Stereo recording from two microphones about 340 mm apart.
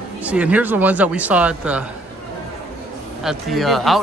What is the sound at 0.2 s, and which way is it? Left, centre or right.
Speech, centre.